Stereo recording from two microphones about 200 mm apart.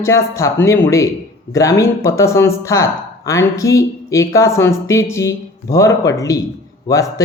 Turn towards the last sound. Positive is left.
turn(degrees=15)  # may be behind; listen again after turning